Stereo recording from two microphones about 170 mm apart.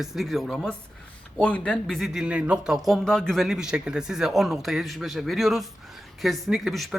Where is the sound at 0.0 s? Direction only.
Centre (ahead or behind).